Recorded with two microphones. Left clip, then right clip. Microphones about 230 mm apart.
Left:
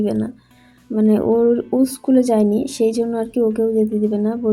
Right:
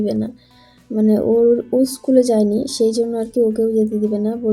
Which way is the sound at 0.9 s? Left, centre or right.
Centre.